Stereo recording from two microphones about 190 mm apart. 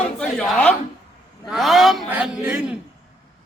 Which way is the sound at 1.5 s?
Centre (ahead or behind).